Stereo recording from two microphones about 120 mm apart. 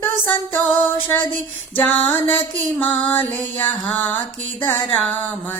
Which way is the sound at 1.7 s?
20° left (ahead or behind).